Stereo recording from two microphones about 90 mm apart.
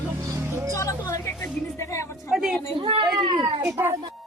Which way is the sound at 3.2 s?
60° right (ahead or behind).